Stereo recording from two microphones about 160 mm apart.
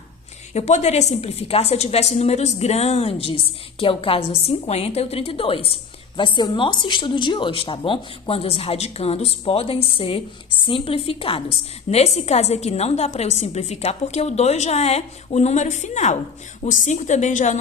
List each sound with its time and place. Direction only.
0.5 s a woman's voice: 45° left (ahead or behind)